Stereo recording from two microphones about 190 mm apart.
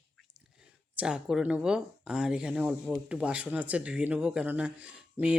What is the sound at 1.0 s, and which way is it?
Speech, 5° right (ahead or behind).